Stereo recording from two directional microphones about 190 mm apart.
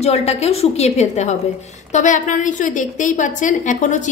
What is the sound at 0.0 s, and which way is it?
A woman's voice, 35° left (ahead or behind).